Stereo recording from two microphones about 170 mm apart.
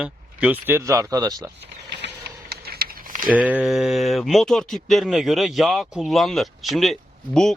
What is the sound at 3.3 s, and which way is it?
Speech, 5° right (ahead or behind).